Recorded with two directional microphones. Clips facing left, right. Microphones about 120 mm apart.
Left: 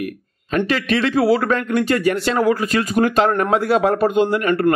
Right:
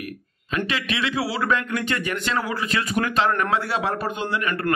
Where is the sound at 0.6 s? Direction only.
40° left (ahead or behind).